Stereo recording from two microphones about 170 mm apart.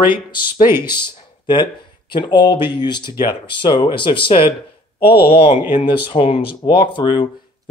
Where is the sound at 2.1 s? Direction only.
25° left (ahead or behind).